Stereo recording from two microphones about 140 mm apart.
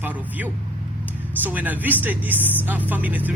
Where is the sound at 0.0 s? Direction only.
10° right (ahead or behind).